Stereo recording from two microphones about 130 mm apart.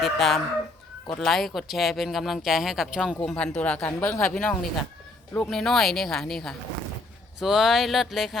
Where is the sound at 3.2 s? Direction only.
10° left (ahead or behind).